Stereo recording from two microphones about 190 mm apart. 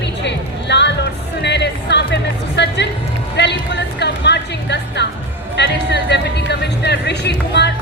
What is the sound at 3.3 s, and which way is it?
Music, 65° left (ahead or behind).